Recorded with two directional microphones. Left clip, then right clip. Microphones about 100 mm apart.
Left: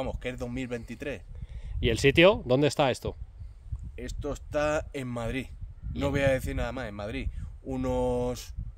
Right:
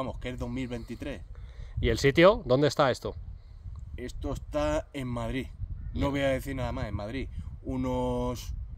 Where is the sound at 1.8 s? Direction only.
20° left (ahead or behind).